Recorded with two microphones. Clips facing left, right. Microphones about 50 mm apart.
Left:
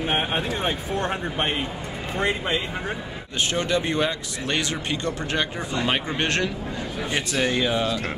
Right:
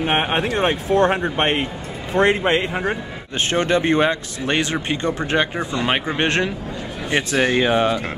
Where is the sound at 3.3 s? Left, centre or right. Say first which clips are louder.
Right 5 dB; right.